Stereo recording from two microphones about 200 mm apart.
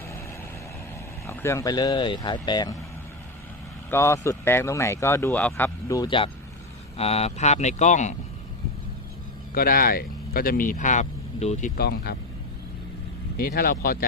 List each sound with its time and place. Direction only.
1.3 s speech: 15° left (ahead or behind)
3.8 s speech: 15° left (ahead or behind); by 8.1 s 35° left (ahead or behind)
9.6 s speech: 45° left (ahead or behind)
11.8 s speech: 50° left (ahead or behind)
13.4 s speech: 50° left (ahead or behind)